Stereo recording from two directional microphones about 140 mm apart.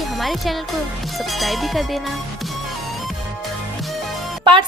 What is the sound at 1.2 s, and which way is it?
Music, centre (ahead or behind).